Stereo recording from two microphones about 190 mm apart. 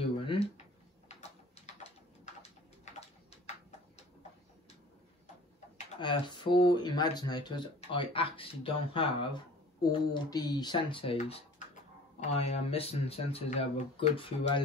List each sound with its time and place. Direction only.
0.2 s tick-tock: 25° left (ahead or behind)
2.4 s bird: 35° left (ahead or behind)
5.9 s speech: 25° left (ahead or behind)